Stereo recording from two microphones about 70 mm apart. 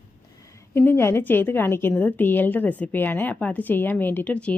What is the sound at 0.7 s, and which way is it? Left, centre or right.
A woman's voice, left.